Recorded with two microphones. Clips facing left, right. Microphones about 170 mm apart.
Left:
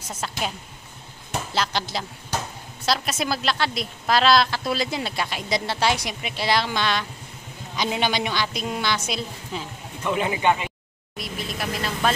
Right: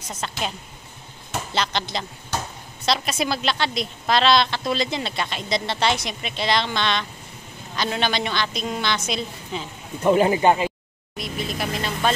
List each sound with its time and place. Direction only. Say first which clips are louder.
0.1 s a woman's voice: even; 5° left (ahead or behind)
1.5 s a woman's voice: right 1 dB; 5° left (ahead or behind)
10.0 s speech: right 5 dB; 35° right (ahead or behind)
11.1 s vehicle: right 3 dB; centre (ahead or behind)